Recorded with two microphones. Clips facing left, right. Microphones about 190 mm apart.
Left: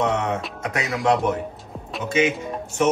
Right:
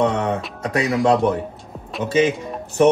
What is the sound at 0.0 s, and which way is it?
Music, 30° right (ahead or behind).